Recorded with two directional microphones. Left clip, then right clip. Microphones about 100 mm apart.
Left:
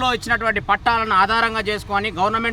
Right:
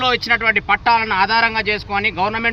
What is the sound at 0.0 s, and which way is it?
Speech, 50° left (ahead or behind).